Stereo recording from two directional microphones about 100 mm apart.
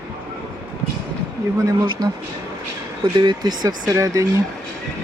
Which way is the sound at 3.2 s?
45° right (ahead or behind).